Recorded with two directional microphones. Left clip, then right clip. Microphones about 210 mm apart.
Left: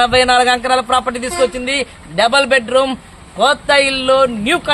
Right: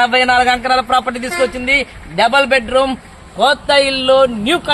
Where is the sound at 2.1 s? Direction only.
25° left (ahead or behind).